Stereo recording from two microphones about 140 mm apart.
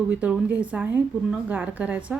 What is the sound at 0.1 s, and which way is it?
A woman's voice, 10° right (ahead or behind).